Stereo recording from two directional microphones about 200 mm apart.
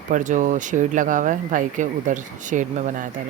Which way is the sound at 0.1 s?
40° right (ahead or behind).